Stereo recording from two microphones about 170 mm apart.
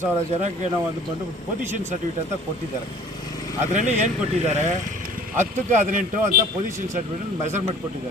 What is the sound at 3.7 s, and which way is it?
Speech, 45° right (ahead or behind).